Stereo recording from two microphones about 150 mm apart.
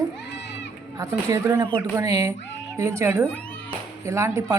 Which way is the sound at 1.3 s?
20° right (ahead or behind).